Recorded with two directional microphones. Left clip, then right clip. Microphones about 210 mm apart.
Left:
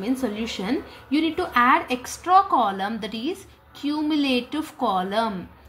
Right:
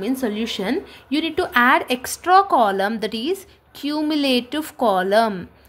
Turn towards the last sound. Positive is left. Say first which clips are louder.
# right 6 dB
turn(degrees=-50)  # may be behind; listen again after turning